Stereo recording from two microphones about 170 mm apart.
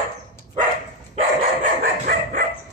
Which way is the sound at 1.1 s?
50° right (ahead or behind).